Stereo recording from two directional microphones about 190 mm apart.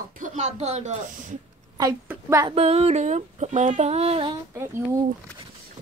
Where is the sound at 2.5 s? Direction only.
35° right (ahead or behind).